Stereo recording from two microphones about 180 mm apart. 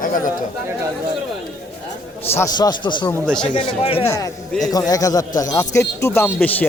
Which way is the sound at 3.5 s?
30° left (ahead or behind).